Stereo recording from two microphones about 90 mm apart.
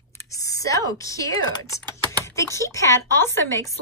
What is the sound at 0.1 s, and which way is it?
Speech, 35° left (ahead or behind).